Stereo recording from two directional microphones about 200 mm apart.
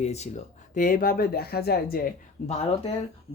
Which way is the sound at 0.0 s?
35° left (ahead or behind).